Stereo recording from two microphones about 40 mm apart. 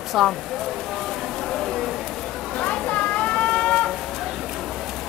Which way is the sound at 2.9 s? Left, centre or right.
Left.